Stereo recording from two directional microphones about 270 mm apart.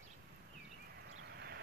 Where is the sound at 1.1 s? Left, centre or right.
Right.